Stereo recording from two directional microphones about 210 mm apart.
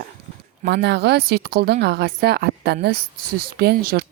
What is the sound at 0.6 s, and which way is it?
Speech, 50° right (ahead or behind).